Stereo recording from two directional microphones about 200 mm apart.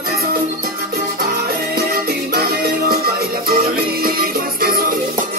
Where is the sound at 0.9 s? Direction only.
50° right (ahead or behind).